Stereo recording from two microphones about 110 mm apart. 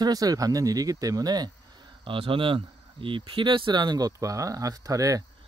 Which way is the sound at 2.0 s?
50° right (ahead or behind).